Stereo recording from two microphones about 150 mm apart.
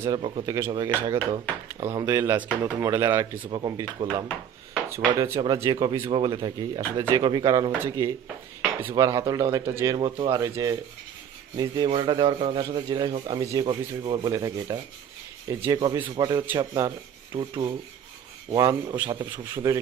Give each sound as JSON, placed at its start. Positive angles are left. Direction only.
{"t": 0.1, "sound": "a man's voice", "side_deg": -35}
{"t": 0.5, "sound": "speech", "side_deg": -20}
{"t": 4.8, "sound": "a man's voice", "side_deg": -20}
{"t": 9.9, "sound": "a man's voice", "side_deg": -35}
{"t": 10.4, "sound": "a man's voice", "side_deg": -20}
{"t": 12.6, "sound": "speech", "side_deg": -25}
{"t": 13.7, "sound": "a man's voice", "side_deg": -35}